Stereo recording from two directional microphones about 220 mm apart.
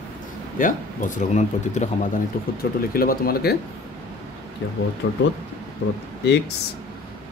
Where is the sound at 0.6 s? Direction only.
35° left (ahead or behind).